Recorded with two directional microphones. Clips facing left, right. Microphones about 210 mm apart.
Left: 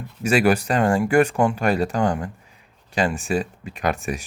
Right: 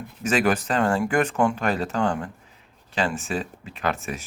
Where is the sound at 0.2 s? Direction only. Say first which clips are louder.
Left 4 dB; 10° left (ahead or behind).